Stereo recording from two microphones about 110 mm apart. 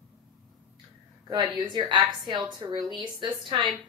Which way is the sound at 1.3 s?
40° right (ahead or behind).